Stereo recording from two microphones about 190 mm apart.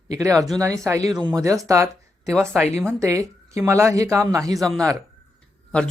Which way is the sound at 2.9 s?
15° right (ahead or behind).